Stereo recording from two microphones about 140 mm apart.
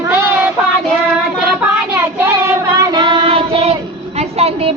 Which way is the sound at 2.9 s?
35° right (ahead or behind).